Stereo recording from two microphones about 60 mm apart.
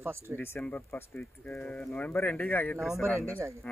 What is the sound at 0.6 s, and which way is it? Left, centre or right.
Speech, left.